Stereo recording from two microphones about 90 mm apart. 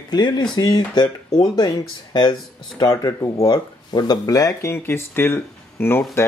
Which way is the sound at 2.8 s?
40° left (ahead or behind).